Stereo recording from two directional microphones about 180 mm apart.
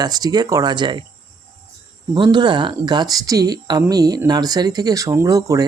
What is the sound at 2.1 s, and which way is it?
Speech, 25° right (ahead or behind).